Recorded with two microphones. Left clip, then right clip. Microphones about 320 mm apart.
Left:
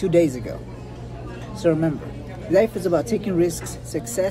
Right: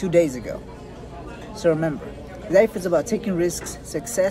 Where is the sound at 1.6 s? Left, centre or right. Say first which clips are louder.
Even; centre.